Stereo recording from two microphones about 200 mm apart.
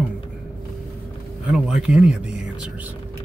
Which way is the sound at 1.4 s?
5° right (ahead or behind).